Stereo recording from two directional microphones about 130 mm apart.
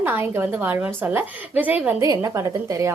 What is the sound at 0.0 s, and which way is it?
A woman's voice, 15° right (ahead or behind).